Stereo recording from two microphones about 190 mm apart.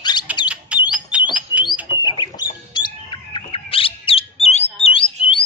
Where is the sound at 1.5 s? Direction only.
25° left (ahead or behind).